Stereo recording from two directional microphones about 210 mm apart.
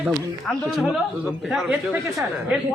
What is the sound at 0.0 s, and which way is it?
A man's voice, centre (ahead or behind).